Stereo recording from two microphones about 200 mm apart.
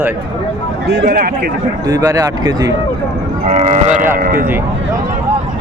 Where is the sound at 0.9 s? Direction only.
55° right (ahead or behind).